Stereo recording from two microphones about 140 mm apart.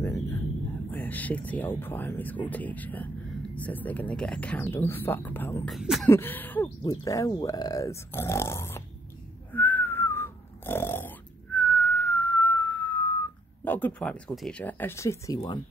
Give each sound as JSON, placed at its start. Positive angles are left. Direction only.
{"t": 0.8, "sound": "speech", "side_deg": 10}
{"t": 5.7, "sound": "speech", "side_deg": 0}
{"t": 6.0, "sound": "speech", "side_deg": 15}
{"t": 6.8, "sound": "speech", "side_deg": 25}
{"t": 9.5, "sound": "whistling", "side_deg": 15}
{"t": 13.7, "sound": "speech", "side_deg": 10}
{"t": 15.3, "sound": "speech", "side_deg": 30}